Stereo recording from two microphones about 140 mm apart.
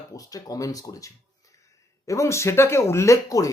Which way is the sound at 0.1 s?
25° left (ahead or behind).